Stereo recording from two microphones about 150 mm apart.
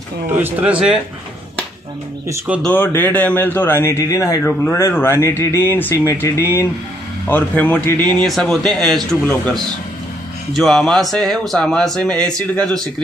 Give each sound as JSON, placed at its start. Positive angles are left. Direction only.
{"t": 0.4, "sound": "speech", "side_deg": -10}
{"t": 2.6, "sound": "a man's voice", "side_deg": 15}